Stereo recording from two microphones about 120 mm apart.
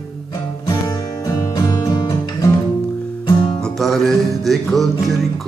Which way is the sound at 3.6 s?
Centre (ahead or behind).